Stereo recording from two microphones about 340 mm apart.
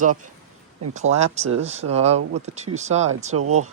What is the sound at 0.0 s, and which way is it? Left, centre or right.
Speech, right.